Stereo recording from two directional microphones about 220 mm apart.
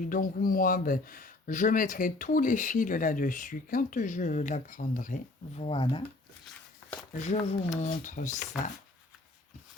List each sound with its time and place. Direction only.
0.1 s speech: 40° left (ahead or behind)
5.5 s speech: 25° left (ahead or behind)
7.2 s speech: 30° left (ahead or behind)